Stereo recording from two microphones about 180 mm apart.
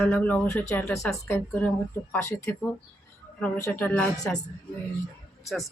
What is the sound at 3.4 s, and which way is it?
Speech, 10° left (ahead or behind).